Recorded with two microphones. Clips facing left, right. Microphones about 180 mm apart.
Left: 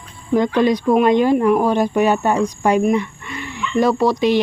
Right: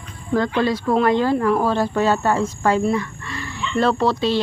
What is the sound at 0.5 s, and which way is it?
Speech, 15° left (ahead or behind).